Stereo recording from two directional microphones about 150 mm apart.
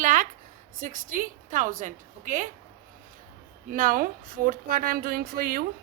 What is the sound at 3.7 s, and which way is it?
A woman's voice, 65° right (ahead or behind).